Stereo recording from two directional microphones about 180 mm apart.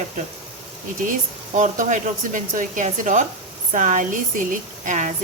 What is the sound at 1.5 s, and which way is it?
Speech, 45° right (ahead or behind).